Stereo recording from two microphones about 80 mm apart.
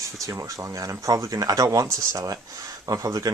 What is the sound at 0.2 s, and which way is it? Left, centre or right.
Speech, right.